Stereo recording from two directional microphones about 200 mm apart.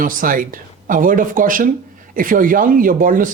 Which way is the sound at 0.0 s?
45° right (ahead or behind).